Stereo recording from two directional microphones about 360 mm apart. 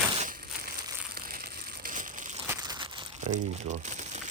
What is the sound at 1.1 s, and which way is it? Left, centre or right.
Crumpling, right.